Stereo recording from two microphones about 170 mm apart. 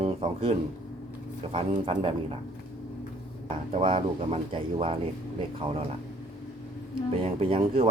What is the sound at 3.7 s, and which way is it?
Speech, 35° right (ahead or behind).